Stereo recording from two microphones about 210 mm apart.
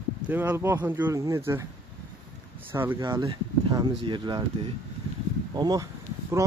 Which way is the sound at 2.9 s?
20° right (ahead or behind).